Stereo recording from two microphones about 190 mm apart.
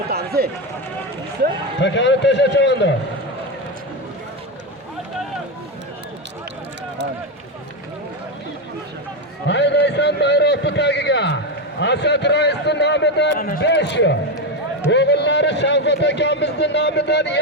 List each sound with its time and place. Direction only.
0.1 s run: 55° right (ahead or behind)
1.8 s a man's voice: 70° left (ahead or behind)
9.5 s a sound: 65° left (ahead or behind)
11.8 s a man's voice: 65° left (ahead or behind); by 13.6 s 50° left (ahead or behind)
13.6 s a man's voice: 65° left (ahead or behind)